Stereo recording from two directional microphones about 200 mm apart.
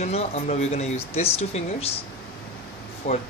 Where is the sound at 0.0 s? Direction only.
30° left (ahead or behind).